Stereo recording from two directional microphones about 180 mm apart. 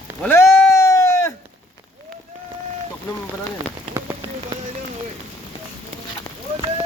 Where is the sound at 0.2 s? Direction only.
10° left (ahead or behind).